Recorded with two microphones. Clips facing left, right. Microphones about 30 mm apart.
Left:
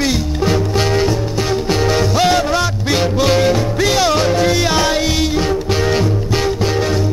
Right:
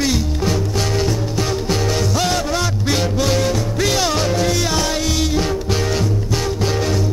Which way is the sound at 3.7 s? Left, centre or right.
Centre.